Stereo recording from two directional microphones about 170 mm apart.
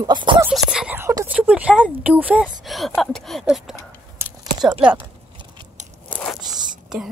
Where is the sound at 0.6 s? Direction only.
5° right (ahead or behind).